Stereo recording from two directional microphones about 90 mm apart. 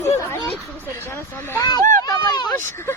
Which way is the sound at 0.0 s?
30° left (ahead or behind).